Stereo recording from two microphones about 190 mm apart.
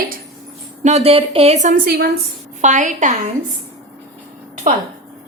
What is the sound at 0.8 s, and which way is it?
A woman's voice, 35° right (ahead or behind).